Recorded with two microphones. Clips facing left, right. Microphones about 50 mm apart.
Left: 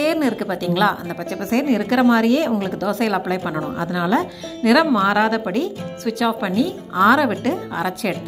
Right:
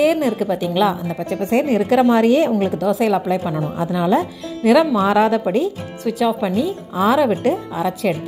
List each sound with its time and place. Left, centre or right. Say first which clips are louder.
0.0 s a woman's voice: right 3 dB; centre; by 2.5 s right
2.8 s a woman's voice: right 3 dB; centre
4.9 s a woman's voice: right 2 dB; right
6.1 s speech: right 1 dB; centre